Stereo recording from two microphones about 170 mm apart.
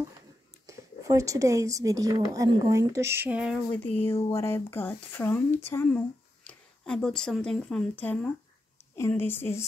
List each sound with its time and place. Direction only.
0.7 s speech: 20° right (ahead or behind)
3.5 s speech: 10° left (ahead or behind)
3.9 s speech: 35° left (ahead or behind)
4.3 s speech: 15° left (ahead or behind)